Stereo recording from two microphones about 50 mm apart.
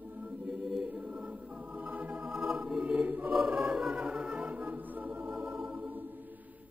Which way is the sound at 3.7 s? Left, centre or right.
Right.